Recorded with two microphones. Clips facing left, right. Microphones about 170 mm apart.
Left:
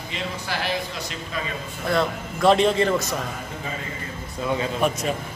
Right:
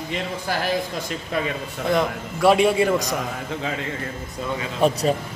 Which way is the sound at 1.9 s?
15° right (ahead or behind).